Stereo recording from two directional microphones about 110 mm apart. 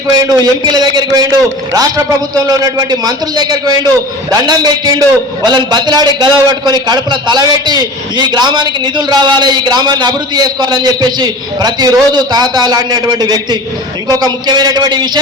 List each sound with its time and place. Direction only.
0.2 s a man's voice: 40° right (ahead or behind)